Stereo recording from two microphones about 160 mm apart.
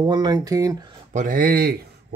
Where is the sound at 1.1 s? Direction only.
60° right (ahead or behind).